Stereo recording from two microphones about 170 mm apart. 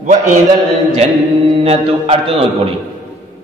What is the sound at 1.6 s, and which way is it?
Mantra, 35° right (ahead or behind).